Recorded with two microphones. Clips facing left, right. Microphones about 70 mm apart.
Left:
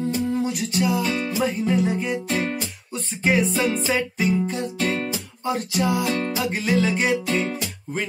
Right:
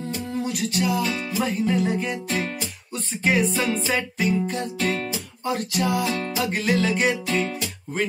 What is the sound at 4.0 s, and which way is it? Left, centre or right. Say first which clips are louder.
Music: left 1 dB; centre.